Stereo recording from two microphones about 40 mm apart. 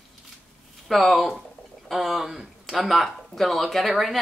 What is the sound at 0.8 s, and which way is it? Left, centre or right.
A woman's voice, centre.